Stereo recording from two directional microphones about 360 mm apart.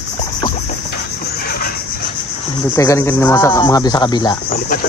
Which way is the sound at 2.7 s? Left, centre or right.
Centre.